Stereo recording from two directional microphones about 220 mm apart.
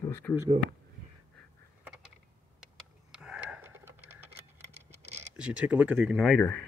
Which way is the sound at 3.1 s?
5° right (ahead or behind).